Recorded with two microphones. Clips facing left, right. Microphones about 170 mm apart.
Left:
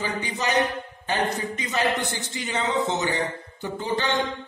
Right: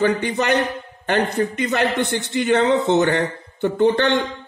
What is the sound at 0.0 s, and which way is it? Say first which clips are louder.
A man's voice: right 9 dB; 65° right (ahead or behind).